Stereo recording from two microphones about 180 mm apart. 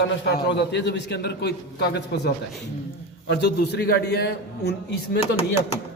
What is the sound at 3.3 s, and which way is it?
A man's voice, 65° left (ahead or behind).